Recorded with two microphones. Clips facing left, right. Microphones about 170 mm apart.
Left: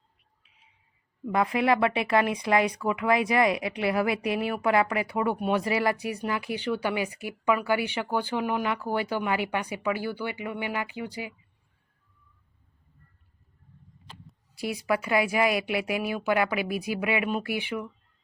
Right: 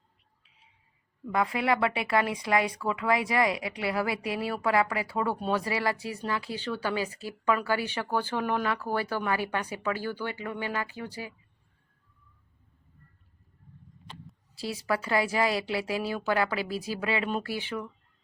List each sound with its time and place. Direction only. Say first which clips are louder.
1.3 s speech: left 3 dB; 20° left (ahead or behind)
14.5 s speech: left 3 dB; 15° left (ahead or behind)